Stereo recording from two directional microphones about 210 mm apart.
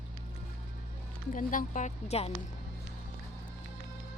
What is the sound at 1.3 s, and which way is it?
Speech, 40° left (ahead or behind).